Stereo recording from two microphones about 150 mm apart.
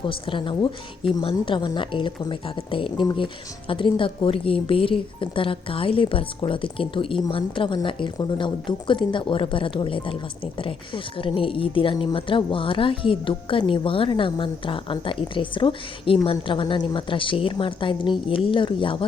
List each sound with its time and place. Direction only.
0.0 s a woman's voice: 35° left (ahead or behind)